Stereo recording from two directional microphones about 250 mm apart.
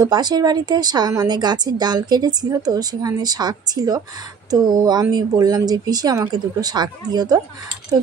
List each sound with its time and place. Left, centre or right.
0.0 s speech: centre